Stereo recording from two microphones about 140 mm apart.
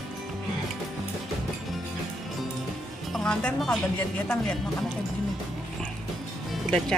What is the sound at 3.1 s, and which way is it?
Speech, 5° left (ahead or behind).